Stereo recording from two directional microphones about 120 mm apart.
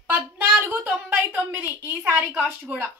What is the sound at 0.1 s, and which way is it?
A woman's voice, 15° right (ahead or behind).